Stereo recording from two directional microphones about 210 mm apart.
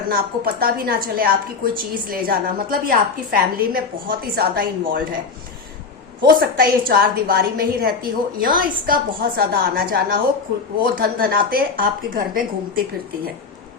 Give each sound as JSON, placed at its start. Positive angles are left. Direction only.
{"t": 0.1, "sound": "a woman's voice", "side_deg": -45}
{"t": 6.2, "sound": "a woman's voice", "side_deg": -45}